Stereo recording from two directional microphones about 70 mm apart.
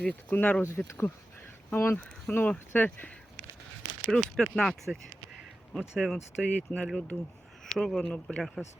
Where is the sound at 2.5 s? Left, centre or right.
Left.